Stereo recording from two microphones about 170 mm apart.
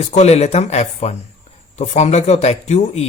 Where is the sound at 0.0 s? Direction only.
40° left (ahead or behind).